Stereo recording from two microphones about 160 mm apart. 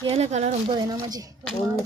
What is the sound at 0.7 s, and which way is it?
Speech, 25° right (ahead or behind).